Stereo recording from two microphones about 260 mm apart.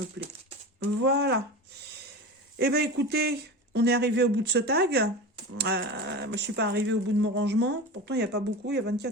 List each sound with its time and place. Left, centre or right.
0.2 s a sound: right
1.0 s speech: right
2.6 s speech: right